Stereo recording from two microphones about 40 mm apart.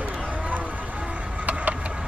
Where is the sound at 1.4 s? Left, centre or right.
Right.